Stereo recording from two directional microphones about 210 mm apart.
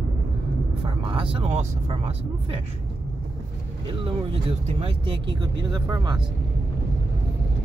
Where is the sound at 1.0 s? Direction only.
25° right (ahead or behind).